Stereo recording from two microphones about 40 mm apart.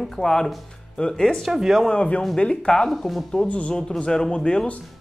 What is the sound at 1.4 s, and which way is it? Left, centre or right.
Speech, centre.